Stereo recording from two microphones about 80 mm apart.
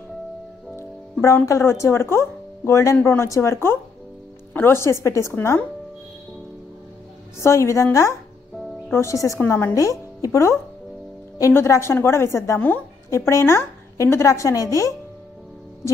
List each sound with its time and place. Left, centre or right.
0.7 s a woman's voice: left
7.3 s a woman's voice: left
9.4 s a woman's voice: left
12.5 s a woman's voice: left
13.1 s a woman's voice: left